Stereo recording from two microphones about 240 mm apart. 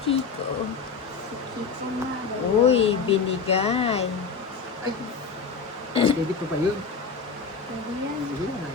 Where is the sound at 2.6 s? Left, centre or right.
Left.